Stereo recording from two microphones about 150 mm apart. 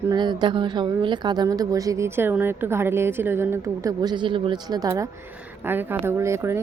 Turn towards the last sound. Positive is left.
turn(degrees=-20)  # may be behind; listen again after turning